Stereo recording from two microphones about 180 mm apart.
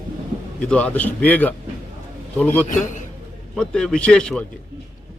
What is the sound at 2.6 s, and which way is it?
Speech, 45° left (ahead or behind).